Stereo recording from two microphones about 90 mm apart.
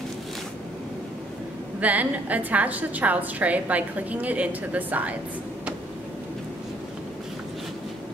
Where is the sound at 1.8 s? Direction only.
15° right (ahead or behind).